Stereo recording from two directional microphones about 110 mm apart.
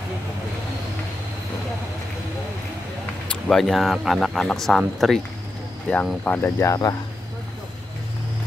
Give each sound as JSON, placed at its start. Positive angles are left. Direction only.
{"t": 3.4, "sound": "speech", "side_deg": 0}
{"t": 6.7, "sound": "speech", "side_deg": 35}